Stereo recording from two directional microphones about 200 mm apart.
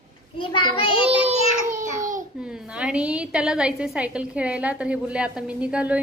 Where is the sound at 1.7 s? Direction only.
40° right (ahead or behind).